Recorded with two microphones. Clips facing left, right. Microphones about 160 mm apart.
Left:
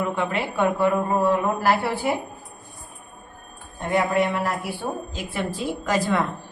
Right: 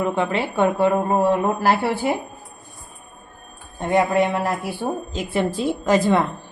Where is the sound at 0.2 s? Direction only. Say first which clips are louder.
Right 3 dB; 30° right (ahead or behind).